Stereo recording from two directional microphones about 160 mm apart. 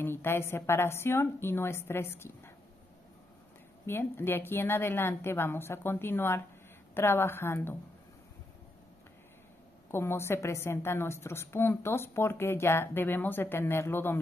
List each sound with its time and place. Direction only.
0.0 s a woman's voice: 15° left (ahead or behind)
3.8 s a woman's voice: 15° left (ahead or behind)
9.8 s a woman's voice: 15° left (ahead or behind)